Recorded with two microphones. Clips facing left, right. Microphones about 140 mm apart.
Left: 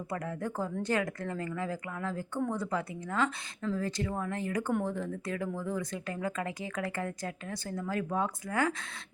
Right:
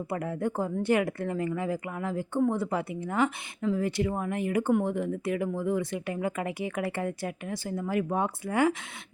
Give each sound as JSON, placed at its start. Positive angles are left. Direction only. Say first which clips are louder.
{"t": 0.1, "sound": "a woman's voice", "louder": "right 5 dB", "side_deg": -25}